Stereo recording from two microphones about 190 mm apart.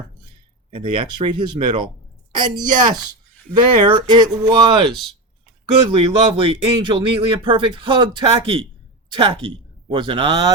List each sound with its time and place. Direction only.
0.7 s speech: 25° right (ahead or behind)
5.9 s speech: 30° right (ahead or behind)